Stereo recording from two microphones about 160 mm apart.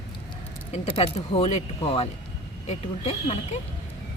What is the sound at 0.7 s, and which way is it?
Speech, 40° left (ahead or behind).